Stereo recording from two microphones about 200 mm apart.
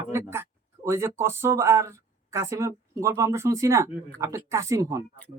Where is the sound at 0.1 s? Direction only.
10° right (ahead or behind).